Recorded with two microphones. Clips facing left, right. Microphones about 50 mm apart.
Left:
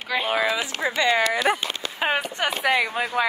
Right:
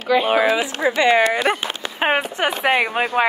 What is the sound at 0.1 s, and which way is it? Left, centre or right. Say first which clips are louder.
Speech: right 7 dB; centre.